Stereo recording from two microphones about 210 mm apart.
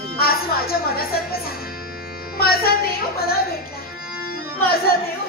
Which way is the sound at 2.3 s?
45° left (ahead or behind).